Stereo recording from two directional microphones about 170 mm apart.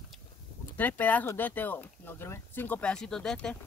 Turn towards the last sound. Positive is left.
turn(degrees=5)  # may be behind; listen again after turning